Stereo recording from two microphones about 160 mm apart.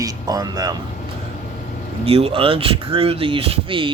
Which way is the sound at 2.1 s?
40° right (ahead or behind).